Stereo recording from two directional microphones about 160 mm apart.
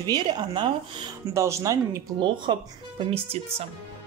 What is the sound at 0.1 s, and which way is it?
Speech, 30° right (ahead or behind).